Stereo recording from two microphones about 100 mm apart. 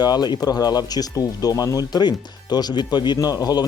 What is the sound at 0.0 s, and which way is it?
Speech, 45° left (ahead or behind).